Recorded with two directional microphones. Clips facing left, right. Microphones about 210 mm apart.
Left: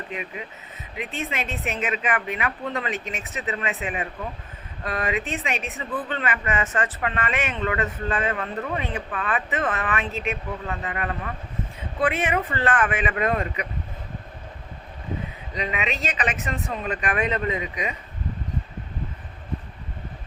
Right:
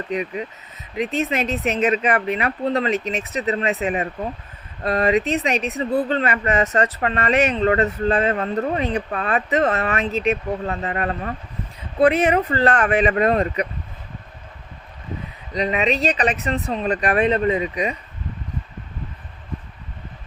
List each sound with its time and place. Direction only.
0.1 s speech: 40° right (ahead or behind)
15.5 s speech: 35° right (ahead or behind)